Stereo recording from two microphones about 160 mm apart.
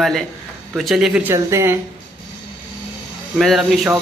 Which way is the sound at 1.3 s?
15° right (ahead or behind).